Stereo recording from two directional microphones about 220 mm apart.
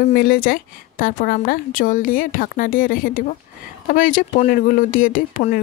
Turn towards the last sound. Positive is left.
turn(degrees=40)  # may be behind; listen again after turning